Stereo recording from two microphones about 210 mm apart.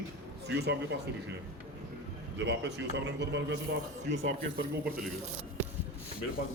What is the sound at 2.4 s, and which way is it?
A man's voice, 55° right (ahead or behind).